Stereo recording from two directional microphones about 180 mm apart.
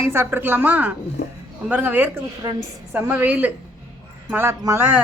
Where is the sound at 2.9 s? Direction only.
10° right (ahead or behind).